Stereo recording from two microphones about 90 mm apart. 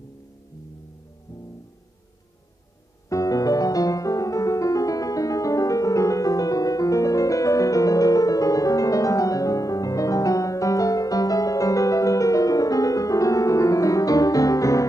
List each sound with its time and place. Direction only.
3.1 s music: 40° left (ahead or behind)